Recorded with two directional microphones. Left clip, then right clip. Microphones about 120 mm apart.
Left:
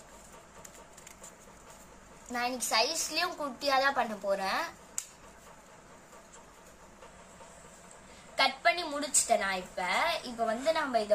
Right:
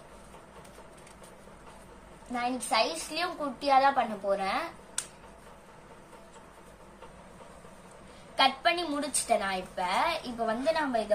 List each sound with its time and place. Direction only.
2.3 s a woman's voice: 35° left (ahead or behind)
8.4 s a woman's voice: 35° left (ahead or behind)